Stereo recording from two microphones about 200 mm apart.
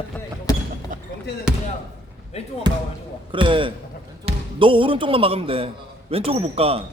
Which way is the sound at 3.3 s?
25° right (ahead or behind).